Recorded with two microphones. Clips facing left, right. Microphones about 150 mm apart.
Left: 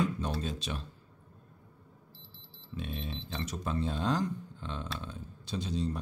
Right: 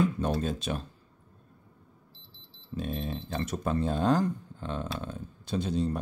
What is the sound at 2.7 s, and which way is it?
Speech, 45° right (ahead or behind).